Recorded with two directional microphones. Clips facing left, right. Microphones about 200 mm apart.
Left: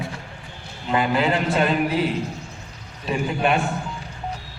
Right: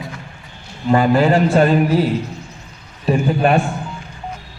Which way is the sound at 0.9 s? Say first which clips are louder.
Right 7 dB; 45° right (ahead or behind).